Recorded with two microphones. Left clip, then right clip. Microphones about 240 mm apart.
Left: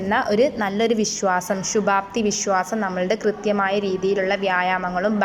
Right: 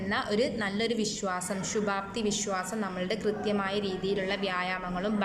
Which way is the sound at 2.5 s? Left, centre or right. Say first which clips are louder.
Left 11 dB; centre.